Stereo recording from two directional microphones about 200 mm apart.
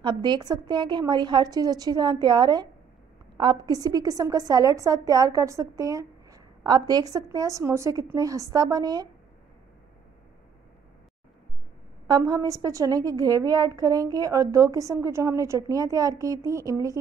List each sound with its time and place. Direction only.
0.0 s a woman's voice: 25° right (ahead or behind)
12.1 s a woman's voice: 20° right (ahead or behind)